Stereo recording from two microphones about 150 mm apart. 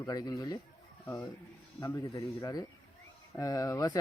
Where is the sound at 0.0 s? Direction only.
25° left (ahead or behind).